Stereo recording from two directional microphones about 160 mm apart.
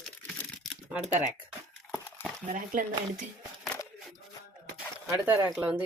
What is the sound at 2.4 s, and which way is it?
Speech, 55° right (ahead or behind).